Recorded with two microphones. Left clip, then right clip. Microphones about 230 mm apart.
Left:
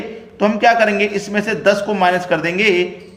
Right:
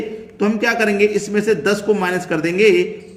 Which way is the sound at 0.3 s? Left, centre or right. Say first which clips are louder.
Left 5 dB; centre.